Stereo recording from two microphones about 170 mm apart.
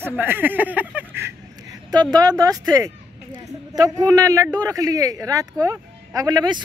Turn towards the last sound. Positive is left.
turn(degrees=-25)  # may be behind; listen again after turning